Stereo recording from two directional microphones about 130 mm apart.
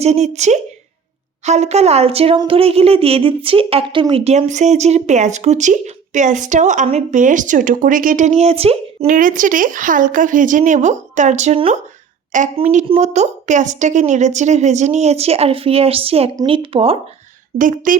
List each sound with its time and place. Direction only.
0.0 s a woman's voice: 55° right (ahead or behind)
9.0 s speech: 90° right; by 11.6 s 60° right (ahead or behind)
12.3 s a woman's voice: 75° right (ahead or behind)
13.0 s a woman's voice: 65° right (ahead or behind); by 17.0 s 45° right (ahead or behind)
17.6 s speech: 90° right